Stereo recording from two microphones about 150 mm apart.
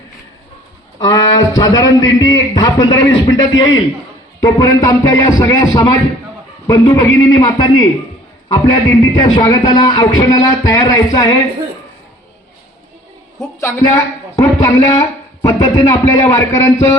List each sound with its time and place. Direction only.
0.9 s a man's voice: 30° left (ahead or behind)
13.4 s a woman's voice: 20° left (ahead or behind)